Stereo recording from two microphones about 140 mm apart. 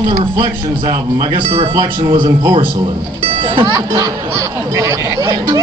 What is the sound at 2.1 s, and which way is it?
Speech, 35° right (ahead or behind).